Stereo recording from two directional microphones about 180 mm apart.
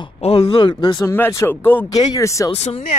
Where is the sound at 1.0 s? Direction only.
15° left (ahead or behind).